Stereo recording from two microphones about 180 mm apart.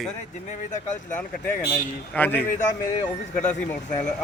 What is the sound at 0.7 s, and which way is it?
Speech, 45° left (ahead or behind).